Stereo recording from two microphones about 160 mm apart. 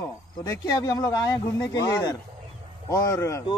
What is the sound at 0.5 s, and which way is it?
Speech, 25° left (ahead or behind).